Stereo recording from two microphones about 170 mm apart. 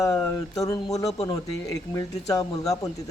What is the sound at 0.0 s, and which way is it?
Speech, 20° left (ahead or behind).